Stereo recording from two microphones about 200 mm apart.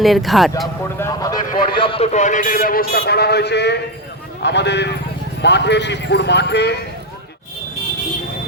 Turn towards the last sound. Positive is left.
turn(degrees=55)  # may be behind; listen again after turning